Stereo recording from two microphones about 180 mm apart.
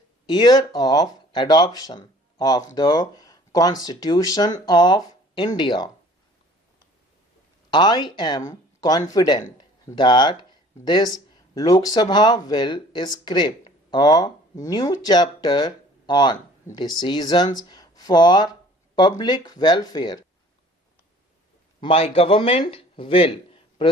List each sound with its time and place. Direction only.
0.3 s speech: 25° left (ahead or behind)
7.7 s speech: 25° left (ahead or behind)
21.8 s speech: 30° left (ahead or behind)